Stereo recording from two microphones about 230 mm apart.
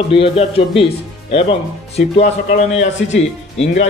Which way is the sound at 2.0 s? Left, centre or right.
Left.